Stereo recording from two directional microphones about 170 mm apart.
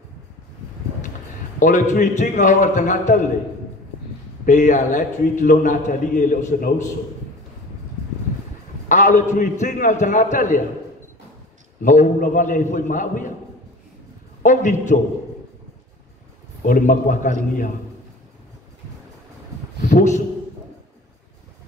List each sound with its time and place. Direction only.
1.6 s a man's voice: 45° left (ahead or behind)
4.5 s a man's voice: 45° left (ahead or behind)
8.8 s a man's voice: 45° left (ahead or behind)
11.8 s a man's voice: 50° left (ahead or behind)
14.4 s a man's voice: 45° left (ahead or behind)
16.6 s a man's voice: 50° left (ahead or behind)
19.8 s speech: 45° left (ahead or behind)